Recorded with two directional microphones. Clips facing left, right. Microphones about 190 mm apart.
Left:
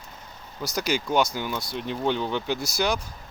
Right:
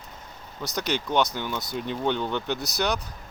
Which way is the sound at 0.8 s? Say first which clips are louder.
Left 1 dB; 5° left (ahead or behind).